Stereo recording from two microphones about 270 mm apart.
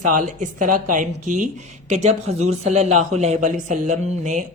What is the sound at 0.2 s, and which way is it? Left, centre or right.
Speech, right.